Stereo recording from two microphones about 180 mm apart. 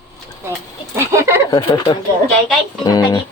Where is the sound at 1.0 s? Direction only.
15° right (ahead or behind).